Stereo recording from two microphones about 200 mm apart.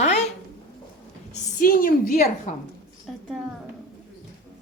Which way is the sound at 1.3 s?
45° left (ahead or behind).